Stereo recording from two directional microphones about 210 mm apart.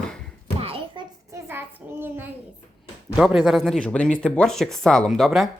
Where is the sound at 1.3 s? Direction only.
10° right (ahead or behind).